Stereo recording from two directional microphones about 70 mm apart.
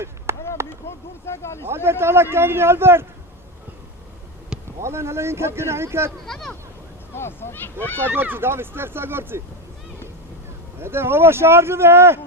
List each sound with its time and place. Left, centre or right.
0.3 s a sound: right
0.9 s speech: left
1.6 s speech: right
4.8 s speech: right
6.2 s speech: centre
7.1 s speech: left
8.1 s speech: right
10.8 s speech: right